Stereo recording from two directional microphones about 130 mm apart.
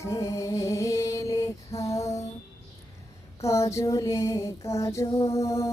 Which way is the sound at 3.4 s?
25° left (ahead or behind).